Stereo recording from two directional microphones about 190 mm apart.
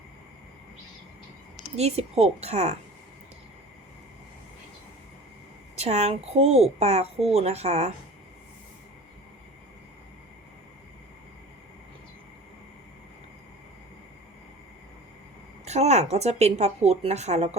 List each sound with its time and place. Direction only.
1.7 s speech: 35° right (ahead or behind)
5.7 s speech: 35° right (ahead or behind)
15.6 s speech: 35° right (ahead or behind)